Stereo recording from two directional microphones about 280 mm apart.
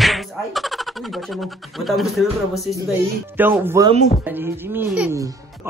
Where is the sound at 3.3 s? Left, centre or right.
Centre.